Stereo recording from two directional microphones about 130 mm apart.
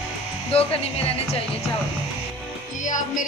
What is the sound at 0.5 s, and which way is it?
Speech, 50° left (ahead or behind).